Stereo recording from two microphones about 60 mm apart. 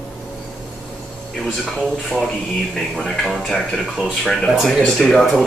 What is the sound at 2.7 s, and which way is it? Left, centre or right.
Speech, centre.